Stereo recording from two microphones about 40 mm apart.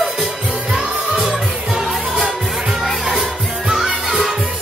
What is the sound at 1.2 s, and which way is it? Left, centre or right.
Music, centre.